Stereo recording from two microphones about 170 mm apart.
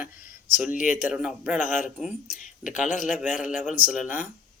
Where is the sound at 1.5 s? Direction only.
50° left (ahead or behind).